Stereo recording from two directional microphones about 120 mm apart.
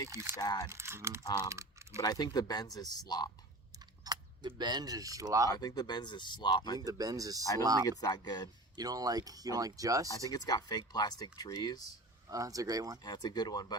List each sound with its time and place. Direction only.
0.1 s speech: 20° right (ahead or behind)
0.3 s speech: 30° left (ahead or behind)
0.7 s speech: 20° right (ahead or behind)
1.5 s typing: 25° right (ahead or behind)
2.0 s speech: 30° left (ahead or behind)
4.0 s speech: 35° right (ahead or behind)
5.5 s speech: 35° left (ahead or behind)
6.7 s speech: 30° right (ahead or behind)
7.9 s speech: 35° left (ahead or behind)
8.7 s speech: 30° right (ahead or behind)
10.3 s speech: 35° left (ahead or behind)
12.3 s speech: 30° right (ahead or behind)
13.0 s speech: 35° left (ahead or behind)